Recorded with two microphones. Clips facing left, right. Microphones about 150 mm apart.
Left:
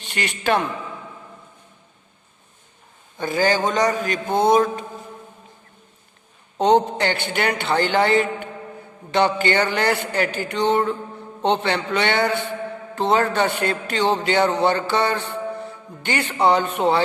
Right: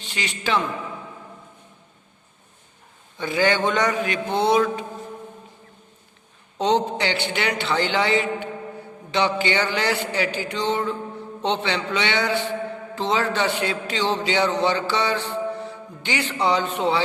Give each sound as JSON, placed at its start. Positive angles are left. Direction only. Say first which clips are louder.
{"t": 0.0, "sound": "a man's voice", "louder": "left 4 dB", "side_deg": 55}
{"t": 3.2, "sound": "mantra", "louder": "left 1 dB", "side_deg": 45}
{"t": 6.6, "sound": "a man's voice", "louder": "left 4 dB", "side_deg": 55}